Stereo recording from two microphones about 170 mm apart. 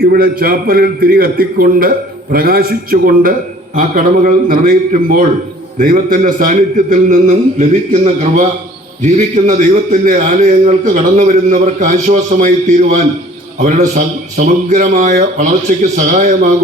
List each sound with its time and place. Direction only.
0.0 s a man's voice: 60° right (ahead or behind)